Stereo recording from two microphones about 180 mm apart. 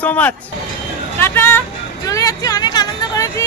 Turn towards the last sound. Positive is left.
turn(degrees=20)  # may be behind; listen again after turning